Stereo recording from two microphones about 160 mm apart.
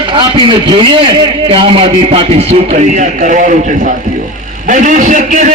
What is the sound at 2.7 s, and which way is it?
A man's voice, 55° right (ahead or behind).